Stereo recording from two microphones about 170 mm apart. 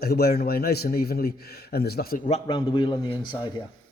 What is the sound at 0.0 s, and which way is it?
A man's voice, 65° left (ahead or behind).